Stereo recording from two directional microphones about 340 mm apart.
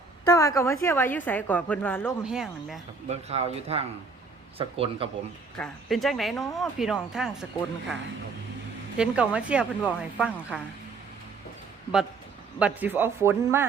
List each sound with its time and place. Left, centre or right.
0.3 s a woman's voice: centre
3.1 s speech: centre
5.5 s a woman's voice: centre
9.0 s a woman's voice: centre
12.5 s a woman's voice: centre